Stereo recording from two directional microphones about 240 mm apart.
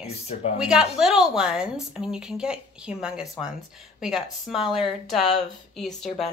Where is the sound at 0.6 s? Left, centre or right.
Centre.